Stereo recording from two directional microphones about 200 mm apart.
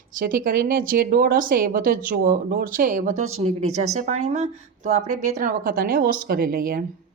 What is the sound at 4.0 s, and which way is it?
Speech, 35° right (ahead or behind).